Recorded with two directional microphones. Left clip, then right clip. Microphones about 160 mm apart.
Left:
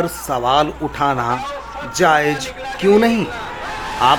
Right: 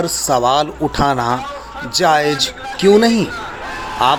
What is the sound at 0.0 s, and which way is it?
Speech, 20° right (ahead or behind).